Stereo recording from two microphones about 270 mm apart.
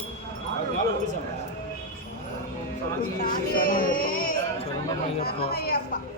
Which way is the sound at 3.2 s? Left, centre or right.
Left.